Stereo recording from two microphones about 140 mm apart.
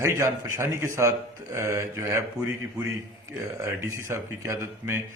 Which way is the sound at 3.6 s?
20° right (ahead or behind).